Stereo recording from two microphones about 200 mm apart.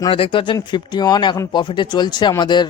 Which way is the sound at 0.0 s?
25° left (ahead or behind).